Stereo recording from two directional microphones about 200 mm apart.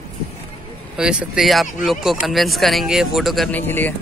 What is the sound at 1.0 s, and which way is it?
Speech, 5° right (ahead or behind).